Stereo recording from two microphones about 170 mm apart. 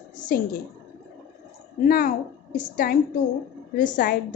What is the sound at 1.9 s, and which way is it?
A woman's voice, 60° left (ahead or behind).